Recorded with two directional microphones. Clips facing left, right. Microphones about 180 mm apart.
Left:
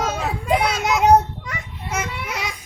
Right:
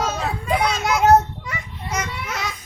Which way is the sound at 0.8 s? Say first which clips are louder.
Even; 20° left (ahead or behind).